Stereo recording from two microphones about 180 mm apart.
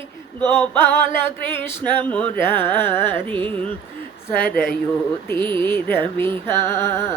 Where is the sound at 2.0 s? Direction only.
10° left (ahead or behind).